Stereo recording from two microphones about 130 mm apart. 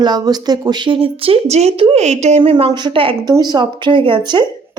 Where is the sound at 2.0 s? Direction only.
60° right (ahead or behind).